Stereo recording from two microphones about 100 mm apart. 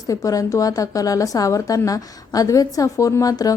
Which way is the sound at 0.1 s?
35° left (ahead or behind).